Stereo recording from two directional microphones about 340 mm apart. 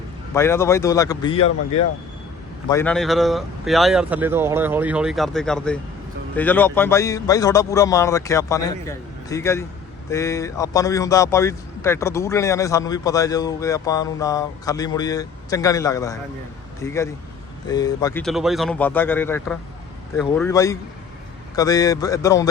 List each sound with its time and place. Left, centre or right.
0.3 s speech: centre
2.6 s speech: centre